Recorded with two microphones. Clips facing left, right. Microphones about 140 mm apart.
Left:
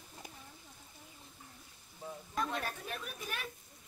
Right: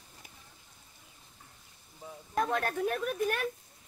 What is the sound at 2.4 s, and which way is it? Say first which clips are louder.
A woman's voice: right 8 dB; 55° right (ahead or behind).